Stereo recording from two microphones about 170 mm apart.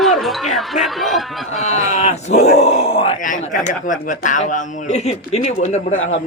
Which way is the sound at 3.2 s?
50° left (ahead or behind).